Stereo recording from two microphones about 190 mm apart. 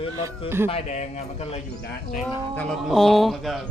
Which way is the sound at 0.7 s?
35° left (ahead or behind).